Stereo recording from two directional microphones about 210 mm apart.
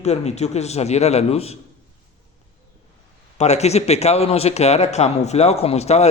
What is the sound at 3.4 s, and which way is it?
A man's voice, 30° left (ahead or behind).